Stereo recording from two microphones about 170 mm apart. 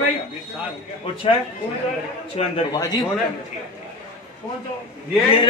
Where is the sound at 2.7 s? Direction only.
20° left (ahead or behind).